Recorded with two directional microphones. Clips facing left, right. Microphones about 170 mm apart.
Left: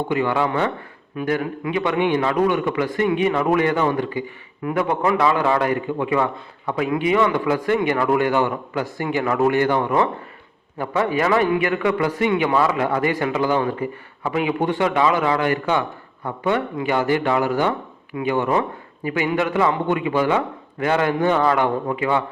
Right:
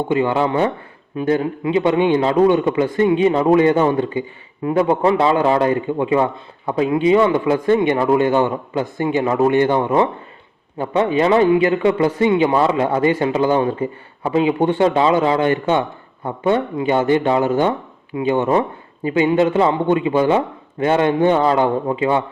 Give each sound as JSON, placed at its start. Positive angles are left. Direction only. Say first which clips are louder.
{"t": 0.1, "sound": "a man's voice", "louder": "right 4 dB", "side_deg": -25}